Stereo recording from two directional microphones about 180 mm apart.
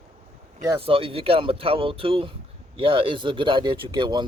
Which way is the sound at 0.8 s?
30° right (ahead or behind).